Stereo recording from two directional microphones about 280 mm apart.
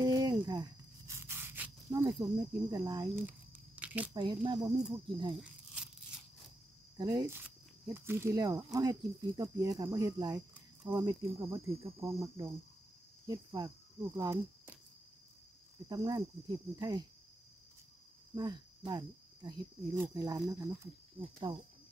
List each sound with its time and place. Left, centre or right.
0.0 s a sound: centre
4.1 s speech: centre
7.0 s speech: centre
15.9 s speech: centre
18.3 s speech: centre